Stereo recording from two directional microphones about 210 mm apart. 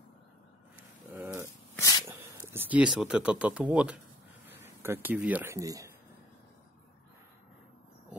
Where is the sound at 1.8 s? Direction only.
15° left (ahead or behind).